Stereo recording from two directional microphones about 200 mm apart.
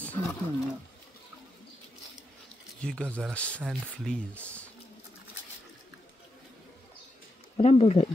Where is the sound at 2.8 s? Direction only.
5° left (ahead or behind).